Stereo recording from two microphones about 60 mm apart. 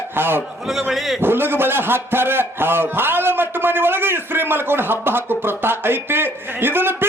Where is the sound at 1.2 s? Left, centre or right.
Right.